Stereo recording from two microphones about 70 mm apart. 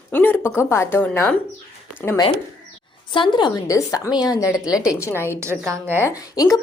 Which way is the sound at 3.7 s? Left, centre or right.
Left.